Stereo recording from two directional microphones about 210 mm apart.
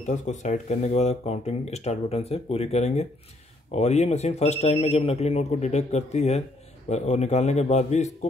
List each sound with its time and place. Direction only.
0.0 s speech: 35° left (ahead or behind)